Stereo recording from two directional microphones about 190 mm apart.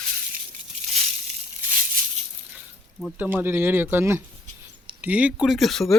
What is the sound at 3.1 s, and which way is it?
Speech, 10° right (ahead or behind).